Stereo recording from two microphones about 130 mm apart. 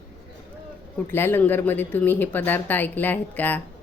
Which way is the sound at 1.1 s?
15° left (ahead or behind).